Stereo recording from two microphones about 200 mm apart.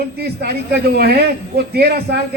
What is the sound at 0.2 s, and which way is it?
A man's voice, 50° right (ahead or behind).